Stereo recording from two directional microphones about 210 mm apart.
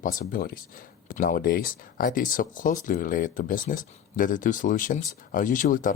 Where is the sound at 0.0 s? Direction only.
40° left (ahead or behind).